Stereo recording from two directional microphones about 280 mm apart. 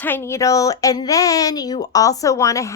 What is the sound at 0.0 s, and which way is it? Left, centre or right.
A woman's voice, centre.